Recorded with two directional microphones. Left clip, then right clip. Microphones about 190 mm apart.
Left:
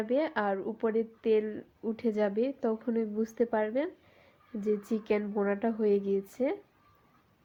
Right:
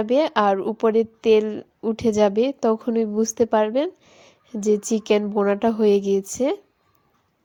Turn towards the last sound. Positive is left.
turn(degrees=-40)  # may be behind; listen again after turning